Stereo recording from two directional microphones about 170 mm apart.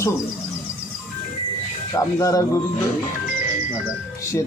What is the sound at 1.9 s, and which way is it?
Speech, 20° left (ahead or behind).